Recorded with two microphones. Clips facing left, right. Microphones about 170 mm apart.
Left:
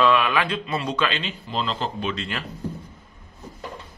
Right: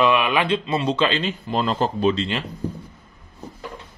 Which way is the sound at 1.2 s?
50° right (ahead or behind).